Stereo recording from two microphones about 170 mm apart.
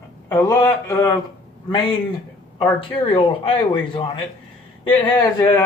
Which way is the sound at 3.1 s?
30° left (ahead or behind).